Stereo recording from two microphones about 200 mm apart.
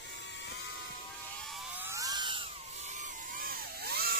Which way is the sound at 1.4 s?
Centre (ahead or behind).